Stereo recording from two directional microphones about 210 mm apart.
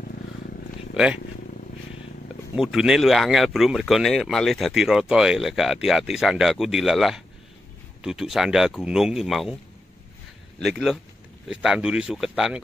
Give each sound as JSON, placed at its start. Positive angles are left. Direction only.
{"t": 0.0, "sound": "vehicle", "side_deg": 40}
{"t": 0.9, "sound": "speech", "side_deg": -5}
{"t": 2.5, "sound": "speech", "side_deg": 0}
{"t": 10.6, "sound": "speech", "side_deg": 0}